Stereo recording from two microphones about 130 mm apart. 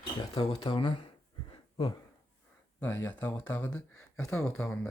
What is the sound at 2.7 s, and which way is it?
Speech, 15° left (ahead or behind).